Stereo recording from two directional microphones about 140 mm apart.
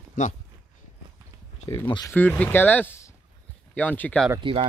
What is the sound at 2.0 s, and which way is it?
Speech, 15° left (ahead or behind).